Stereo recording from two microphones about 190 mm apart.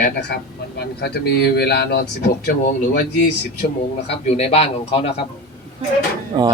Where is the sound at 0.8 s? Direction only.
60° left (ahead or behind).